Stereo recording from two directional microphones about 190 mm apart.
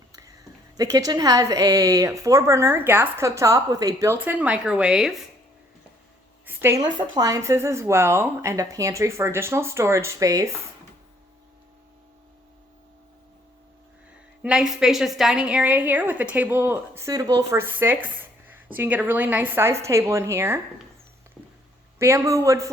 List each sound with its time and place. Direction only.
0.1 s a sound: 15° right (ahead or behind)
0.8 s a woman's voice: 20° right (ahead or behind); by 5.2 s centre (ahead or behind)
6.4 s a woman's voice: 10° right (ahead or behind)
14.4 s a woman's voice: 5° right (ahead or behind)
21.9 s a woman's voice: 15° right (ahead or behind)